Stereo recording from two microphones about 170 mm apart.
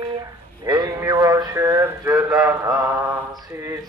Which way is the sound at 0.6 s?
25° right (ahead or behind).